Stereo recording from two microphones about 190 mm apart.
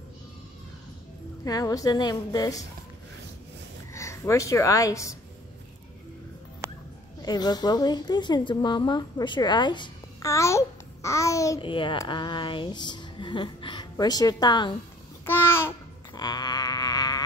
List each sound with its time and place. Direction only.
1.4 s a woman's voice: 20° left (ahead or behind)
3.9 s a woman's voice: 15° left (ahead or behind)
6.6 s dog: 15° right (ahead or behind)
7.2 s a woman's voice: 20° left (ahead or behind)
15.2 s babbling: 10° left (ahead or behind)
16.2 s a sound: 20° left (ahead or behind)